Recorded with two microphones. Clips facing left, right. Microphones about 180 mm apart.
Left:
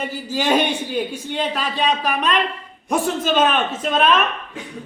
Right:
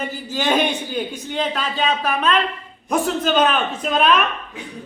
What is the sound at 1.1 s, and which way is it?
A man's voice, 5° left (ahead or behind).